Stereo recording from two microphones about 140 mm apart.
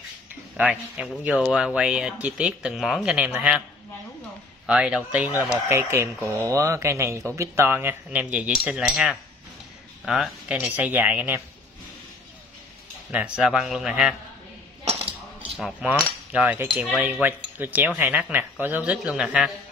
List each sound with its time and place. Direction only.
0.6 s speech: 10° right (ahead or behind)
4.6 s speech: 5° right (ahead or behind)
5.7 s speech: 20° right (ahead or behind)
13.1 s a man's voice: 5° right (ahead or behind)
15.5 s a man's voice: 5° right (ahead or behind)
16.3 s cutlery: 10° right (ahead or behind)
16.9 s speech: 15° right (ahead or behind)